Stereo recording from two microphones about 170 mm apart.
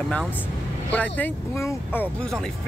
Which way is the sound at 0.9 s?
10° left (ahead or behind).